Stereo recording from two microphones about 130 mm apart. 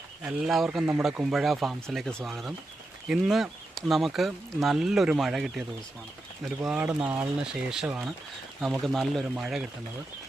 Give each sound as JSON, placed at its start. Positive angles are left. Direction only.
{"t": 0.3, "sound": "speech", "side_deg": -5}
{"t": 6.7, "sound": "speech", "side_deg": -10}
{"t": 7.9, "sound": "speech", "side_deg": -15}
{"t": 8.6, "sound": "speech", "side_deg": 0}